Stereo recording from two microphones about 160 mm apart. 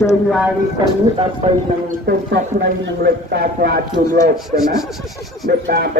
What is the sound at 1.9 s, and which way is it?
Speech, 70° right (ahead or behind).